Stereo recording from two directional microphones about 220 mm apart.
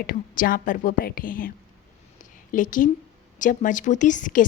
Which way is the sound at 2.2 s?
35° left (ahead or behind).